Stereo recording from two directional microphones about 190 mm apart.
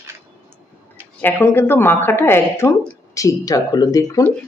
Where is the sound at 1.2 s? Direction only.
10° left (ahead or behind).